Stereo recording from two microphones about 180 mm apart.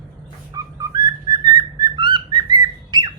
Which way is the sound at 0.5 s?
20° right (ahead or behind).